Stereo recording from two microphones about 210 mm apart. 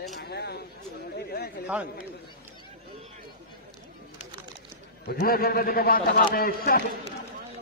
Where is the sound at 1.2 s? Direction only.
50° left (ahead or behind).